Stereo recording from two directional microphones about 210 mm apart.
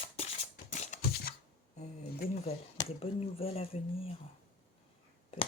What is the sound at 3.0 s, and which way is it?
Speech, 25° left (ahead or behind).